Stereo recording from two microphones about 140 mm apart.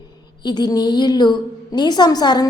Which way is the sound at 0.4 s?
30° left (ahead or behind).